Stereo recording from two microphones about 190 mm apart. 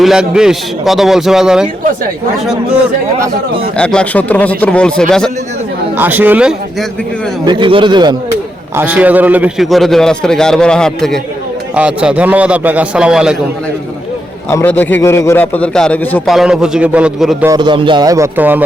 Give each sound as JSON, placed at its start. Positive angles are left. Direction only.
{"t": 0.0, "sound": "a man's voice", "side_deg": -5}
{"t": 3.8, "sound": "a man's voice", "side_deg": 5}
{"t": 6.0, "sound": "a man's voice", "side_deg": -10}
{"t": 7.4, "sound": "speech", "side_deg": -25}
{"t": 8.7, "sound": "a man's voice", "side_deg": -10}
{"t": 14.5, "sound": "a man's voice", "side_deg": 10}
{"t": 17.5, "sound": "speech", "side_deg": -25}